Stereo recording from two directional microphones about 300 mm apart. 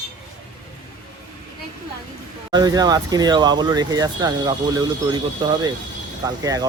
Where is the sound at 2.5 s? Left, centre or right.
Centre.